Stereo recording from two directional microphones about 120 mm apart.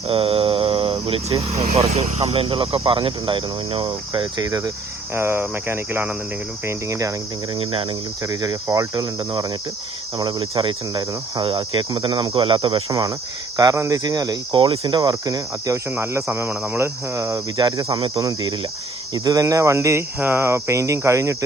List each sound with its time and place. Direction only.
0.1 s mantra: 50° right (ahead or behind)
1.5 s speech: 65° right (ahead or behind); by 4.4 s 45° right (ahead or behind)
4.4 s speech: 30° right (ahead or behind)
7.5 s speech: 50° right (ahead or behind)
8.2 s speech: 30° right (ahead or behind)
12.9 s speech: 30° right (ahead or behind)
15.9 s speech: 20° right (ahead or behind)
17.6 s speech: 35° right (ahead or behind)